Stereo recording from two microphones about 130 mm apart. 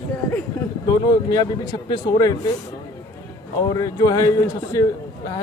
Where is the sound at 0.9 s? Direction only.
30° left (ahead or behind).